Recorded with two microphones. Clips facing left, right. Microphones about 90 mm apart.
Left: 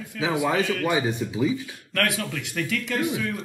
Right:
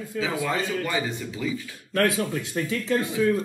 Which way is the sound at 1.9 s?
25° right (ahead or behind).